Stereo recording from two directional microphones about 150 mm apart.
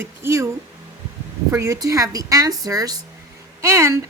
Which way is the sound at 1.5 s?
20° right (ahead or behind).